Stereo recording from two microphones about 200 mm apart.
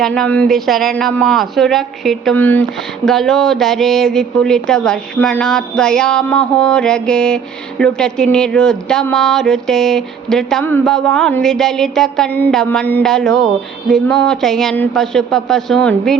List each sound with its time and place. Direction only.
0.0 s speech: 5° left (ahead or behind)